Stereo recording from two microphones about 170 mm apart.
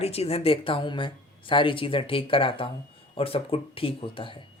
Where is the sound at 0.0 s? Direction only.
35° left (ahead or behind).